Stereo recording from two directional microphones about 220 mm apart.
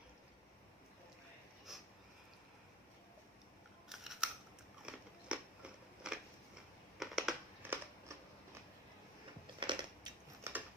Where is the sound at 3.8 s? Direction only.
Centre (ahead or behind).